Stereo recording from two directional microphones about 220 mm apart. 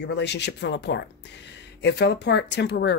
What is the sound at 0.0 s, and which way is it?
Speech, 50° left (ahead or behind).